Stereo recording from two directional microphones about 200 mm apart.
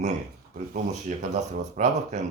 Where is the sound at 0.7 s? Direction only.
35° right (ahead or behind).